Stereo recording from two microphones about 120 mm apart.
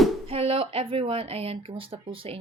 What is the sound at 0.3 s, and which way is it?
Speech, 50° right (ahead or behind).